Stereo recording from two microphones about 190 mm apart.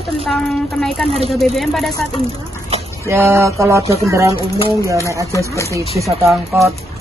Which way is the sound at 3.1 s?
15° right (ahead or behind).